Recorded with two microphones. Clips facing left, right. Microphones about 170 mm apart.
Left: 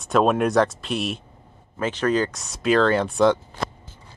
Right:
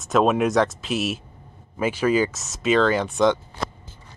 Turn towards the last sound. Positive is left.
turn(degrees=5)  # may be behind; listen again after turning